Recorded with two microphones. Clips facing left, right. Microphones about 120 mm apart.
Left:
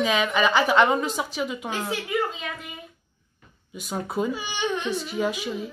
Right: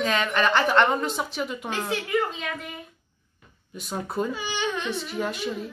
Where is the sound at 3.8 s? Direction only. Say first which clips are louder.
Left 1 dB; centre (ahead or behind).